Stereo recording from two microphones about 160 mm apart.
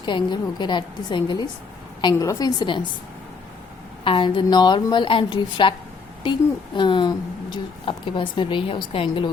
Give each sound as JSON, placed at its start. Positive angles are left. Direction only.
{"t": 0.0, "sound": "a woman's voice", "side_deg": 30}
{"t": 4.0, "sound": "speech", "side_deg": 30}
{"t": 6.7, "sound": "speech", "side_deg": 30}